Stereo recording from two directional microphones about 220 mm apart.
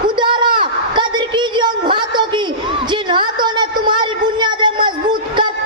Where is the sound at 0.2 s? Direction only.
20° right (ahead or behind).